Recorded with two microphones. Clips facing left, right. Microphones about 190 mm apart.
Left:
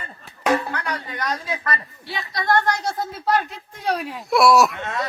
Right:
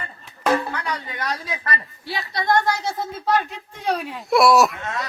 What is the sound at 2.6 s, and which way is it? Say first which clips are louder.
Speech: even; 10° right (ahead or behind).